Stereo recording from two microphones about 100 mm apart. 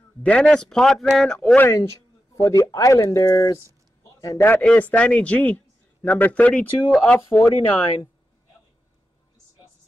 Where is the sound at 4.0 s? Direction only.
35° left (ahead or behind).